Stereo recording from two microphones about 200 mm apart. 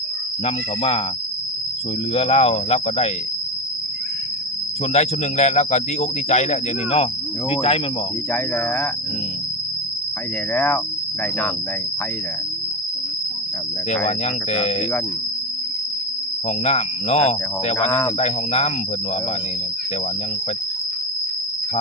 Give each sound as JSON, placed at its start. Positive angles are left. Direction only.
{"t": 0.4, "sound": "speech", "side_deg": 30}
{"t": 2.1, "sound": "speech", "side_deg": 30}
{"t": 4.9, "sound": "speech", "side_deg": 35}
{"t": 8.3, "sound": "speech", "side_deg": 10}
{"t": 10.5, "sound": "speech", "side_deg": 10}
{"t": 14.5, "sound": "speech", "side_deg": 30}
{"t": 16.5, "sound": "speech", "side_deg": 30}